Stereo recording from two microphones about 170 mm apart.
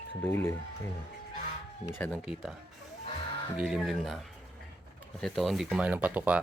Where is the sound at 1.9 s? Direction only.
10° left (ahead or behind).